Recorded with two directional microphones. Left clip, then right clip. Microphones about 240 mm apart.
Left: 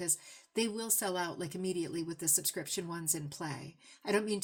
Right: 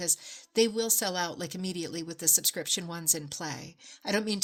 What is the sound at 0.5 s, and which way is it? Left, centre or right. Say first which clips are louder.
Speech: right 9 dB; right.